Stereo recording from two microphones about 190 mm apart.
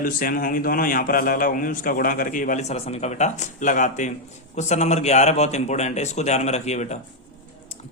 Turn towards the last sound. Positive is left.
turn(degrees=35)  # may be behind; listen again after turning